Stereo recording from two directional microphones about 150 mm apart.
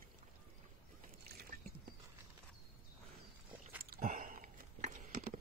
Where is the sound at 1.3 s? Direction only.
90° right.